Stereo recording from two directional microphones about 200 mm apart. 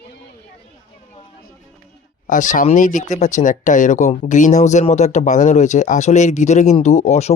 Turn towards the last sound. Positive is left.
turn(degrees=35)  # may be behind; listen again after turning